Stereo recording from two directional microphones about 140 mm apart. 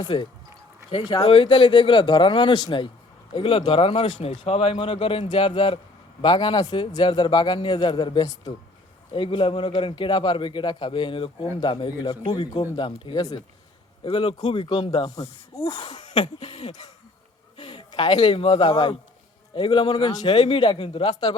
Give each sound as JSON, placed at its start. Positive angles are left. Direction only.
{"t": 0.0, "sound": "a man's voice", "side_deg": 35}